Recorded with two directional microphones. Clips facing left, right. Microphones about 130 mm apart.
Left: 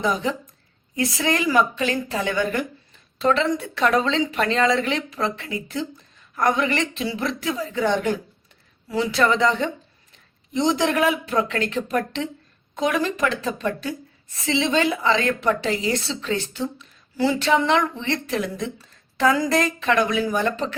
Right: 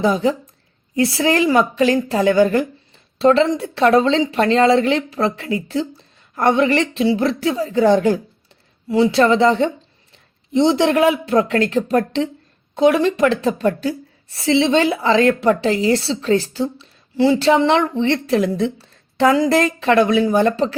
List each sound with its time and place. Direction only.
0.0 s a woman's voice: 35° right (ahead or behind)